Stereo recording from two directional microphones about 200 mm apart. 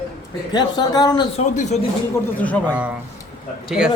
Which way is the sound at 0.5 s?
20° left (ahead or behind).